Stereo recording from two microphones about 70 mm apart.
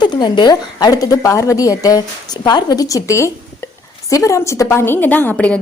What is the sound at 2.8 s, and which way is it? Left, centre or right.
A woman's voice, left.